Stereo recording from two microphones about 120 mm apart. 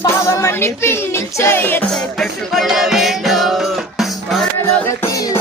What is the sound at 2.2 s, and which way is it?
Music, centre (ahead or behind).